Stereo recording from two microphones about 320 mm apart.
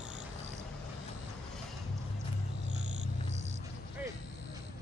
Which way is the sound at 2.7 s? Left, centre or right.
Right.